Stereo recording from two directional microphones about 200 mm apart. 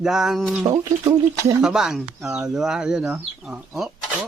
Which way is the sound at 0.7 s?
15° right (ahead or behind).